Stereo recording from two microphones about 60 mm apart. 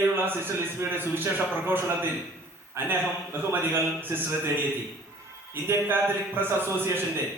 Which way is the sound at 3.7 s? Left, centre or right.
Right.